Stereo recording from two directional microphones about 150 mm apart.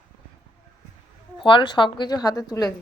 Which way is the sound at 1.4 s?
30° left (ahead or behind).